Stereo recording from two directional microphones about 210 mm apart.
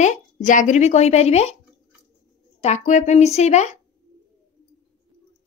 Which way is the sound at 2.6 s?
35° left (ahead or behind).